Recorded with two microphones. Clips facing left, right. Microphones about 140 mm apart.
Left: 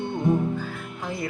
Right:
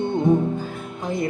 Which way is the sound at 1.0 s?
20° right (ahead or behind).